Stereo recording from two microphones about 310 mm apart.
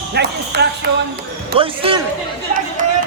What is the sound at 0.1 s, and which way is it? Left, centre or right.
Speech, right.